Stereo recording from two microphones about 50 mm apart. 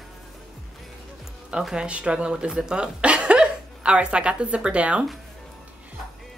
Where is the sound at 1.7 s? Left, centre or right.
Right.